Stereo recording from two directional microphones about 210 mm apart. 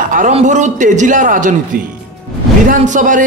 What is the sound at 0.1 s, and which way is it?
A man's voice, 35° right (ahead or behind).